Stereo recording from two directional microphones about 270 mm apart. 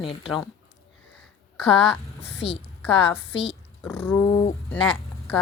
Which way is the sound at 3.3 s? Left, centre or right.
Left.